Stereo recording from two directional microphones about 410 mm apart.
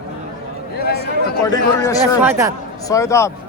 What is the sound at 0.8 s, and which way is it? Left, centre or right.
Speech, left.